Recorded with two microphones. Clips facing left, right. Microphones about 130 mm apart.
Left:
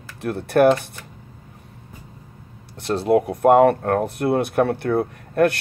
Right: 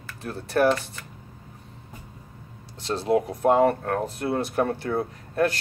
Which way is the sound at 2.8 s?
60° left (ahead or behind).